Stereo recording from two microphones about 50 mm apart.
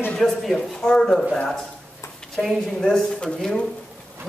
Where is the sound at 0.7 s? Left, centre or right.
Centre.